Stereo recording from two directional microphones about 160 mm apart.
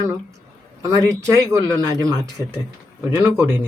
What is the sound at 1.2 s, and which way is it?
Speech, 20° right (ahead or behind).